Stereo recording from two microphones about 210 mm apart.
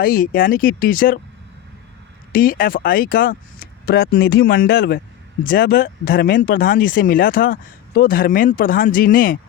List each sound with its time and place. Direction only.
0.0 s speech: 45° left (ahead or behind)
2.3 s speech: 45° left (ahead or behind)